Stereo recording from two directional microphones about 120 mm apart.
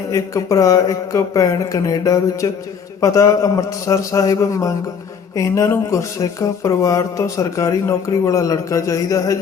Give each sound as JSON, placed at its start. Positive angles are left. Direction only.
{"t": 0.1, "sound": "speech", "side_deg": 25}